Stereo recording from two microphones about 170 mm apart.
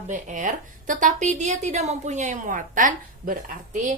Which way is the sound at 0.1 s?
45° right (ahead or behind).